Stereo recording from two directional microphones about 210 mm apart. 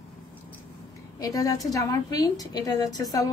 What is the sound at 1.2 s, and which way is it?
A woman's voice, 15° left (ahead or behind).